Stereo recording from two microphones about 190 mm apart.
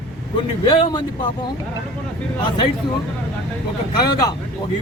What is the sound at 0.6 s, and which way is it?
Speech, 20° left (ahead or behind).